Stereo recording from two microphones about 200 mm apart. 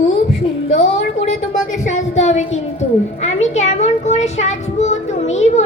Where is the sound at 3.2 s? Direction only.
35° left (ahead or behind).